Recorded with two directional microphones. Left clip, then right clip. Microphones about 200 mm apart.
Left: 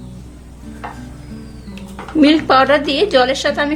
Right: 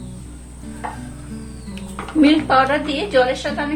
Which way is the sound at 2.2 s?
50° left (ahead or behind).